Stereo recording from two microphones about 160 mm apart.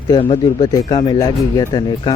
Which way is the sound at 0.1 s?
30° left (ahead or behind).